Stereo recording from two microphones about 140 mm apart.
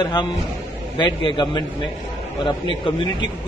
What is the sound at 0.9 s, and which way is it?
Speech, 35° left (ahead or behind).